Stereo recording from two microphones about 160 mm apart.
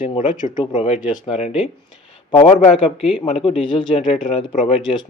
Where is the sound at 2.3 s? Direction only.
30° left (ahead or behind).